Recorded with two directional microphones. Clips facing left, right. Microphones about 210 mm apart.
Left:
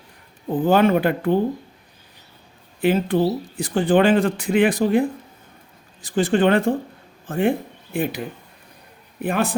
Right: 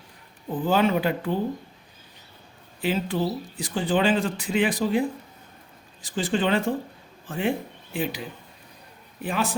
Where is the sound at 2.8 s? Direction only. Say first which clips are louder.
Left 7 dB; 55° left (ahead or behind).